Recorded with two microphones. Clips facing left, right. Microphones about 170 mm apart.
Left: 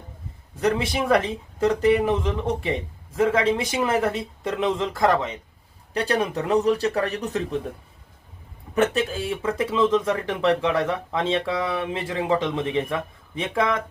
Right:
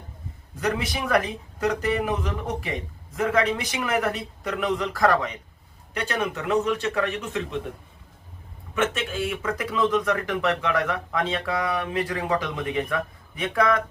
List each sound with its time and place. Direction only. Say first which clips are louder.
0.6 s speech: left 4 dB; 30° left (ahead or behind)
8.7 s speech: left 4 dB; 35° left (ahead or behind)